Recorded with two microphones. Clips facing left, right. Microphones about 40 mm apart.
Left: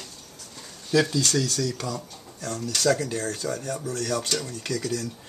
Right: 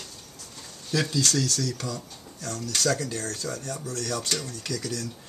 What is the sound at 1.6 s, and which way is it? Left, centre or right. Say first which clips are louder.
Speech: left 2 dB; left.